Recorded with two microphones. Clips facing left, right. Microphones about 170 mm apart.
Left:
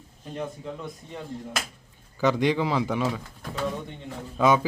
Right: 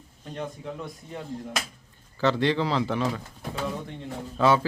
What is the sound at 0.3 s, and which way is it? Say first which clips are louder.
Speech: left 1 dB; centre (ahead or behind).